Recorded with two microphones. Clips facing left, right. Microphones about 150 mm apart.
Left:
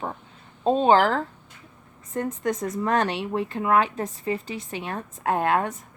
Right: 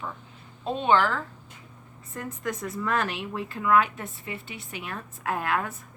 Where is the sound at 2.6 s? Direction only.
35° left (ahead or behind).